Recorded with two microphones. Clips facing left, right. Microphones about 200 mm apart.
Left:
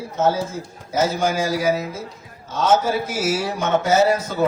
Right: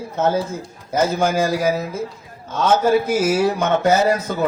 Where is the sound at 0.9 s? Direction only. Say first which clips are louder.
Right 2 dB; 55° right (ahead or behind).